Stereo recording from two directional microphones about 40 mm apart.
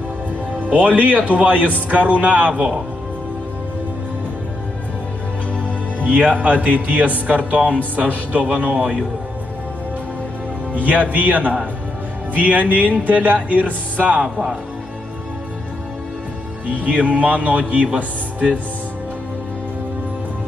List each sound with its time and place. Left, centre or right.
0.6 s a man's voice: right
6.0 s a man's voice: right
10.7 s a man's voice: right
16.6 s a man's voice: right